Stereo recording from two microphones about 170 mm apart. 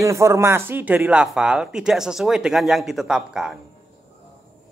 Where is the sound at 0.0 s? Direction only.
15° right (ahead or behind).